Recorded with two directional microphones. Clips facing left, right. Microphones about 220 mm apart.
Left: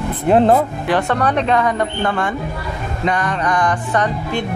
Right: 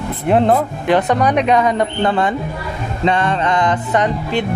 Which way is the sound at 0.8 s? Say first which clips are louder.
Right 3 dB; 20° right (ahead or behind).